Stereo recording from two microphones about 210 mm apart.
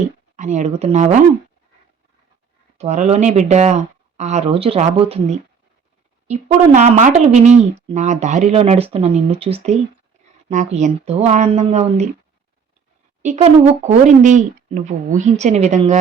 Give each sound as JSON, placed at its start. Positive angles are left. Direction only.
{"t": 0.3, "sound": "speech", "side_deg": -35}
{"t": 2.7, "sound": "speech", "side_deg": -35}
{"t": 13.2, "sound": "speech", "side_deg": -30}